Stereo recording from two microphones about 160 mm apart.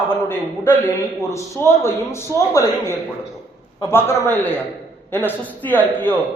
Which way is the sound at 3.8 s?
15° left (ahead or behind).